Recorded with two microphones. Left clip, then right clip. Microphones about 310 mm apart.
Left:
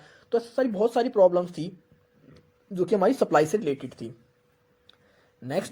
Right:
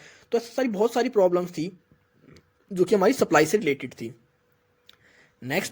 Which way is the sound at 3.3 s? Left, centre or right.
Right.